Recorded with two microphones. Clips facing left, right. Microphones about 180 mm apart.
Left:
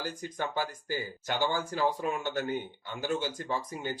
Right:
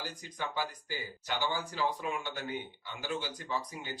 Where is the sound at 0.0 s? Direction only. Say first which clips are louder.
Left 5 dB; 50° left (ahead or behind).